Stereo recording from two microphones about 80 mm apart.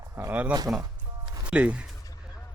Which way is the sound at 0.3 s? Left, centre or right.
Centre.